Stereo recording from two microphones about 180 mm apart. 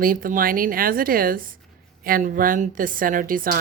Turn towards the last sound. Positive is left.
turn(degrees=-50)  # may be behind; listen again after turning